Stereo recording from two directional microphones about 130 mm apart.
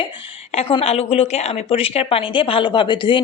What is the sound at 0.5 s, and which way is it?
A woman's voice, 50° left (ahead or behind).